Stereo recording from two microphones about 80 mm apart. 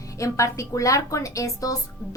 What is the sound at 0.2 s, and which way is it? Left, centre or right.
A woman's voice, left.